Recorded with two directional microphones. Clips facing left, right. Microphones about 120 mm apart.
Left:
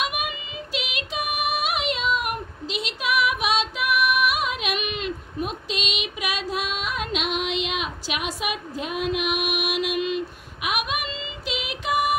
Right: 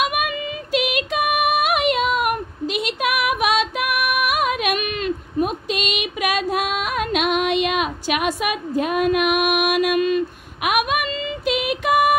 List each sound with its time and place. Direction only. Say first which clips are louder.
0.0 s female singing: right 7 dB; 55° right (ahead or behind)